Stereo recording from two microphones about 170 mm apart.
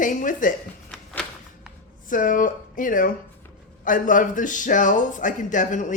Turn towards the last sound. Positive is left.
turn(degrees=50)  # may be behind; listen again after turning